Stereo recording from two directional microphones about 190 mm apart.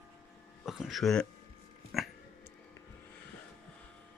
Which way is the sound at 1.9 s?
Centre (ahead or behind).